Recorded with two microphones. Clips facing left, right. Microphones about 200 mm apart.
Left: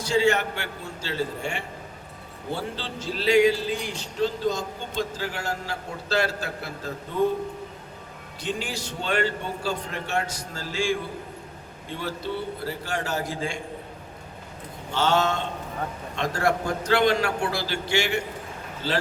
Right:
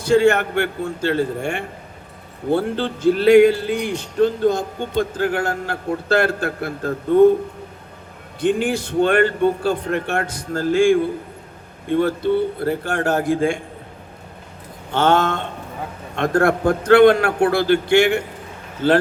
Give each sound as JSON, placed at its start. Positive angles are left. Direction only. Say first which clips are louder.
{"t": 0.0, "sound": "speech", "louder": "right 7 dB", "side_deg": -55}
{"t": 8.4, "sound": "speech", "louder": "right 12 dB", "side_deg": -55}
{"t": 14.8, "sound": "speech", "louder": "right 6 dB", "side_deg": -55}